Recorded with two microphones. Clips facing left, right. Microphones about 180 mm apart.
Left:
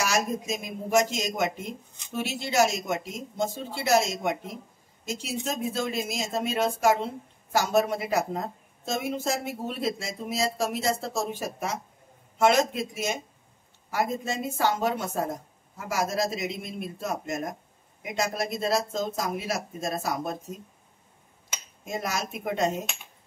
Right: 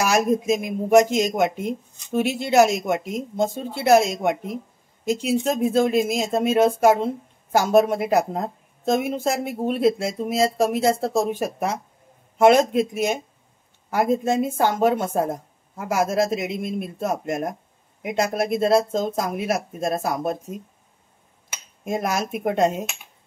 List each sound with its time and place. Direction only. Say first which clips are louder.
0.0 s a woman's voice: right 7 dB; 55° right (ahead or behind)
21.8 s a woman's voice: right 7 dB; 55° right (ahead or behind)